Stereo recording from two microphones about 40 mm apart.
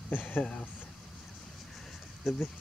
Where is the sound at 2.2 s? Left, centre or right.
Centre.